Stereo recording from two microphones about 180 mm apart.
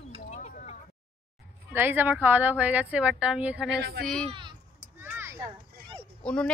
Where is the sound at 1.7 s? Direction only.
10° right (ahead or behind).